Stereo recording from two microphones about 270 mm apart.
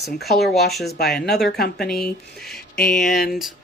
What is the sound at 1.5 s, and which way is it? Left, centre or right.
Speech, left.